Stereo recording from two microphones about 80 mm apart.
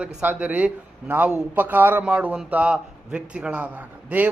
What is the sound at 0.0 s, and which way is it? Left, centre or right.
A man's voice, right.